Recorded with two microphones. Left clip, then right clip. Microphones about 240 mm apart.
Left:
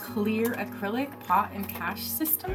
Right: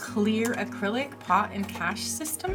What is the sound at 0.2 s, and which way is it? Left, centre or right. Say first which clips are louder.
A woman's voice: right 1 dB; right.